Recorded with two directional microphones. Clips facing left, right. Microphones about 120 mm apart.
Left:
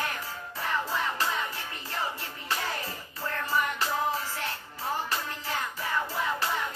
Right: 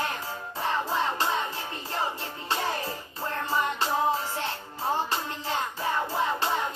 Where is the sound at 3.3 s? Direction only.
25° right (ahead or behind).